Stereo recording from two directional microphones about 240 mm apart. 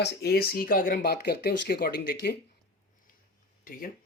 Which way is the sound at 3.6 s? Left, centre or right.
Left.